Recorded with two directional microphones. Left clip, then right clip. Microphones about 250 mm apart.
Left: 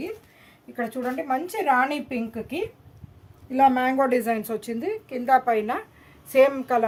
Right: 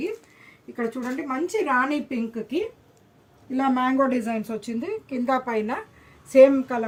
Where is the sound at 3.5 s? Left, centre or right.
Left.